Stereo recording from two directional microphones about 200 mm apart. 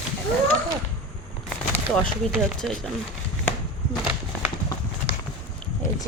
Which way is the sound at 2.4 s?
Centre (ahead or behind).